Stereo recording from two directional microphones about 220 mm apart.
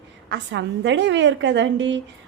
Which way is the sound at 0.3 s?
55° right (ahead or behind).